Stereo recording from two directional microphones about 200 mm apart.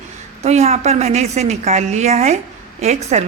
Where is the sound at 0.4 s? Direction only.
30° right (ahead or behind).